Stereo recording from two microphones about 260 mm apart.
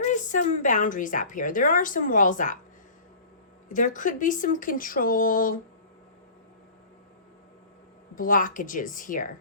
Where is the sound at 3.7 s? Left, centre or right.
Left.